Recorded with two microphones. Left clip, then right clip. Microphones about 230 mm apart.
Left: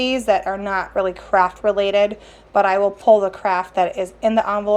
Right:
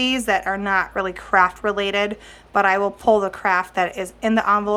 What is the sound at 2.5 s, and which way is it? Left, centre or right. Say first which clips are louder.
Speech: left 2 dB; right.